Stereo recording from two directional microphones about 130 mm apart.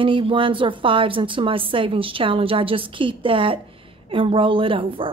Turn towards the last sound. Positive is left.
turn(degrees=-40)  # may be behind; listen again after turning